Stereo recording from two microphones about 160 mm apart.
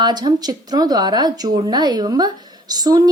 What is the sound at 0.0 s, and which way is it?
Speech, 25° right (ahead or behind).